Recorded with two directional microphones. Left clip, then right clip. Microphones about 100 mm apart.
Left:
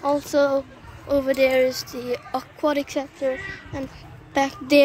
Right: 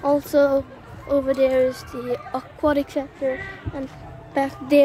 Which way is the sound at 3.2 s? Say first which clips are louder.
Even; 15° left (ahead or behind).